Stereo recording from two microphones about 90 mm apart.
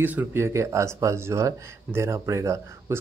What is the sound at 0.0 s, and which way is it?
Speech, 20° right (ahead or behind).